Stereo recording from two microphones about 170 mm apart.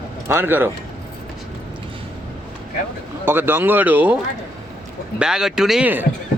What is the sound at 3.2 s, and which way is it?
Speech, 10° right (ahead or behind).